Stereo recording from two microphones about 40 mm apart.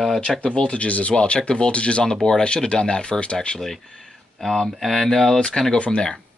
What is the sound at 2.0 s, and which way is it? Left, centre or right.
Speech, centre.